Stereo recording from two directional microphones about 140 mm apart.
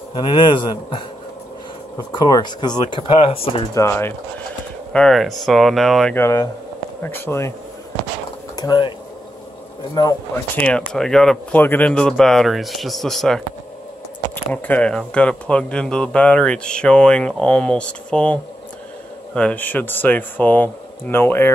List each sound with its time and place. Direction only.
0.1 s speech: 35° left (ahead or behind)
2.1 s speech: 30° left (ahead or behind)
3.7 s speech: 20° left (ahead or behind)
4.9 s speech: 5° left (ahead or behind)
6.1 s speech: 20° left (ahead or behind)
8.5 s speech: 30° left (ahead or behind)
10.0 s speech: 30° left (ahead or behind)
10.3 s speech: 10° left (ahead or behind)